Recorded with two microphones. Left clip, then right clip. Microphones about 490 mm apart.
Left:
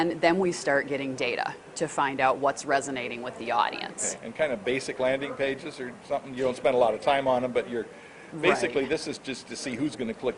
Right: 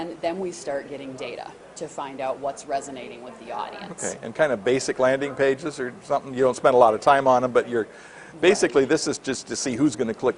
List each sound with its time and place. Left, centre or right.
0.0 s a woman's voice: left
4.4 s a man's voice: right